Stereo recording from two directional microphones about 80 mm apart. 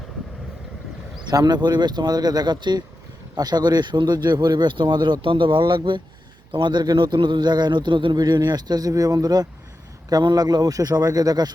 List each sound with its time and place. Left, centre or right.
1.2 s a man's voice: right